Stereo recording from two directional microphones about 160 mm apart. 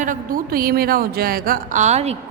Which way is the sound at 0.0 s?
55° right (ahead or behind).